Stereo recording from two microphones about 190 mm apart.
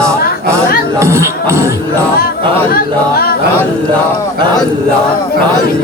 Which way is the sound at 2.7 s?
55° left (ahead or behind).